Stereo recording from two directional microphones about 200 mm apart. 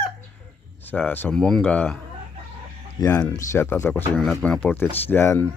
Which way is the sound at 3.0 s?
15° left (ahead or behind).